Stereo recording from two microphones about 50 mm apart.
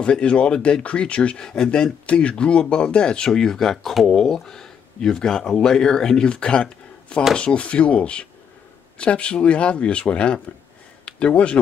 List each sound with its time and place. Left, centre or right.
0.0 s speech: left